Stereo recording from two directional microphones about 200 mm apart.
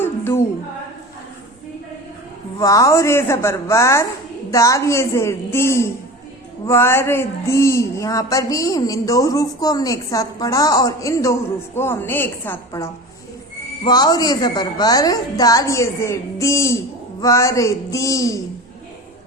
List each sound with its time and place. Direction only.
0.0 s singing: 10° left (ahead or behind)
2.6 s speech: 15° left (ahead or behind)